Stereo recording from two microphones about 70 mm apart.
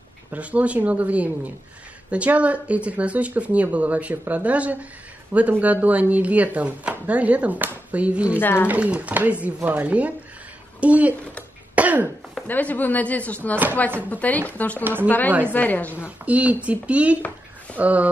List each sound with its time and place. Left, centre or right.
0.3 s speech: centre
8.4 s a woman's voice: left
8.6 s speech: right
11.7 s throat clearing: right
12.4 s a woman's voice: left
14.8 s speech: right
15.0 s a woman's voice: left
16.0 s speech: centre